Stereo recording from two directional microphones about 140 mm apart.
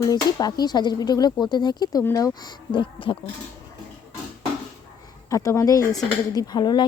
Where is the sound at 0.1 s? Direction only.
30° left (ahead or behind).